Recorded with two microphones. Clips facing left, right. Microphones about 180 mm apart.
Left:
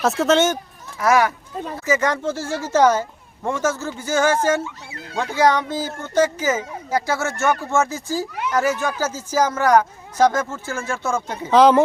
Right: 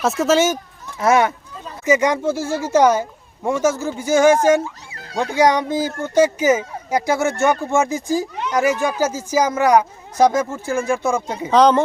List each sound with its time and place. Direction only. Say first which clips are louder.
0.0 s speech: right 1 dB; centre (ahead or behind)
0.9 s speech: right 2 dB; 25° right (ahead or behind)
11.5 s speech: even; centre (ahead or behind)